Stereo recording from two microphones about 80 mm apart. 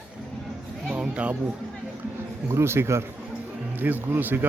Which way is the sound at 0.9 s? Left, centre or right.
Centre.